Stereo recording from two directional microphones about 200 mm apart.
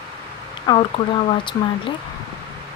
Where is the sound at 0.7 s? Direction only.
20° left (ahead or behind).